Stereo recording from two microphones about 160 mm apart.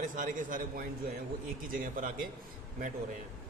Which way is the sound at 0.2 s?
55° right (ahead or behind).